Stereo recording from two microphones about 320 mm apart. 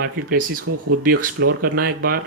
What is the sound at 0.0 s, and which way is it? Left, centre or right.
Speech, right.